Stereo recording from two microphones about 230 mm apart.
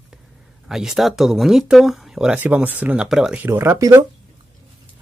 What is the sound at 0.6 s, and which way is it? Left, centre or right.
Speech, centre.